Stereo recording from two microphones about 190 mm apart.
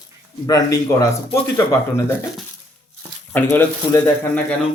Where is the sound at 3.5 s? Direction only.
10° left (ahead or behind).